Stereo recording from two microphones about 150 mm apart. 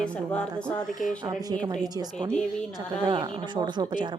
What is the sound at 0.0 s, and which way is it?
Speech, 5° left (ahead or behind).